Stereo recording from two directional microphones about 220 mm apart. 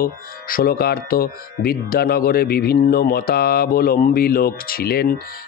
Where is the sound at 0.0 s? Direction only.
40° left (ahead or behind).